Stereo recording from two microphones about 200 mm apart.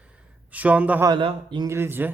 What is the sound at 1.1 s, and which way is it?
Speech, 25° right (ahead or behind).